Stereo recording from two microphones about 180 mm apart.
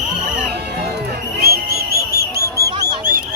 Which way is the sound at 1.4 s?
60° right (ahead or behind).